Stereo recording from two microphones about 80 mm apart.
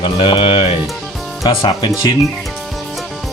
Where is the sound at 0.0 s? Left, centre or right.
Left.